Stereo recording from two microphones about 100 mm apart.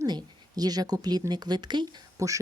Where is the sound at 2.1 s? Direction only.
35° right (ahead or behind).